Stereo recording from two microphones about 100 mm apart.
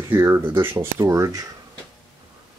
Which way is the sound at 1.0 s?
35° right (ahead or behind).